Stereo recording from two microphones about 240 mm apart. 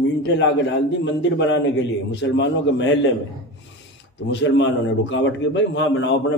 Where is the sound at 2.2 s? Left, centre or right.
Left.